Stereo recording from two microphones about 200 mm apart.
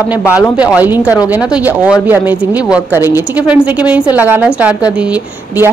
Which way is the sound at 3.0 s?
15° left (ahead or behind).